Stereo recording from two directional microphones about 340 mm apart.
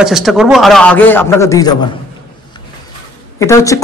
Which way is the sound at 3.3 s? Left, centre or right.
Centre.